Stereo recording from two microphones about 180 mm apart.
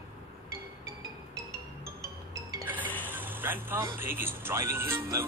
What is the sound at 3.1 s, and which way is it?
Speech, 10° right (ahead or behind).